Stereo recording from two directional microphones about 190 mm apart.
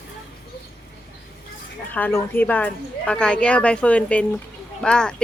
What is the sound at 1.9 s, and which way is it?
Speech, 10° left (ahead or behind).